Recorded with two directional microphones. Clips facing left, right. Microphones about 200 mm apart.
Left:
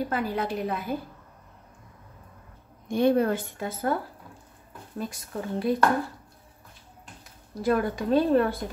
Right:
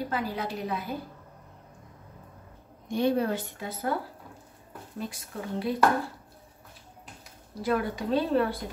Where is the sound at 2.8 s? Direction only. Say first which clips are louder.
Left 4 dB; 50° left (ahead or behind).